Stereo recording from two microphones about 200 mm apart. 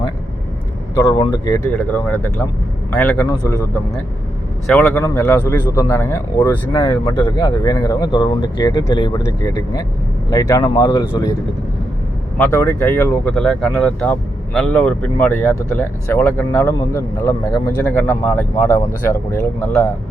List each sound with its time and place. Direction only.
0.9 s speech: 15° left (ahead or behind)
4.6 s speech: 10° left (ahead or behind)
12.4 s speech: 10° left (ahead or behind)